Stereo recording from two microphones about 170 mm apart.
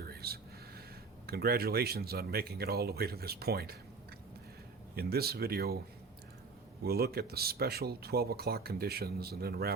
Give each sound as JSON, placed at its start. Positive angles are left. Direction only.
{"t": 0.1, "sound": "a sound", "side_deg": -65}
{"t": 1.3, "sound": "speech", "side_deg": -65}
{"t": 4.9, "sound": "speech", "side_deg": -65}
{"t": 6.8, "sound": "speech", "side_deg": -65}